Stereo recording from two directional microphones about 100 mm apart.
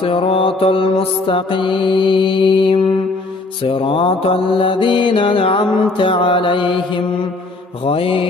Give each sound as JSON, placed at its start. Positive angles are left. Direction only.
{"t": 0.0, "sound": "mantra", "side_deg": 60}